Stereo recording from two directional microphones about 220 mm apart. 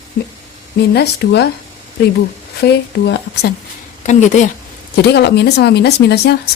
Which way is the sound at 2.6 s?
50° left (ahead or behind).